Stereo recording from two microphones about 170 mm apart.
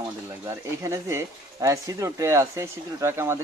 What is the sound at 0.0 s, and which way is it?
Speech, 15° right (ahead or behind).